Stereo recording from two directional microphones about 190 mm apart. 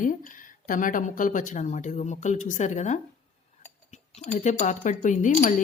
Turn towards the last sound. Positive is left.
turn(degrees=40)  # may be behind; listen again after turning